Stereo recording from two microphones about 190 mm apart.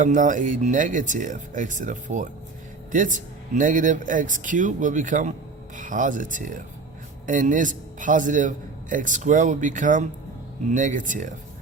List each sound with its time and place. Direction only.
0.0 s a man's voice: 40° right (ahead or behind)